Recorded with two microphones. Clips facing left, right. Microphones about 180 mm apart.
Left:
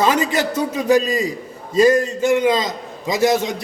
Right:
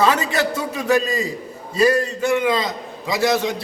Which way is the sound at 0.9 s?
15° left (ahead or behind).